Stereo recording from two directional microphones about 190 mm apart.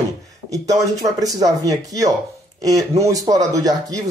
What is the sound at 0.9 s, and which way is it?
Speech, 20° right (ahead or behind).